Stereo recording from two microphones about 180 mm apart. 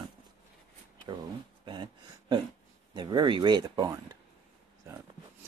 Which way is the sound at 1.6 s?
25° right (ahead or behind).